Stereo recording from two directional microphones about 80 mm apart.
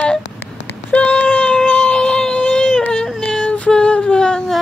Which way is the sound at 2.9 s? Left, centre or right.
Centre.